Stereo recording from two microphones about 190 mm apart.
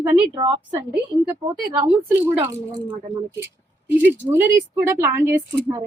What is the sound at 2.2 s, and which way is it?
Speech, 10° right (ahead or behind).